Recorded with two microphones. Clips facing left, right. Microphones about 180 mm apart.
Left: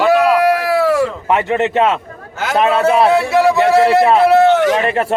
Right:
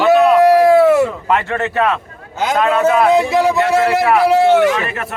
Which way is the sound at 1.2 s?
15° left (ahead or behind).